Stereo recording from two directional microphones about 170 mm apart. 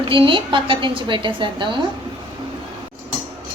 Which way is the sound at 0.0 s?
30° right (ahead or behind).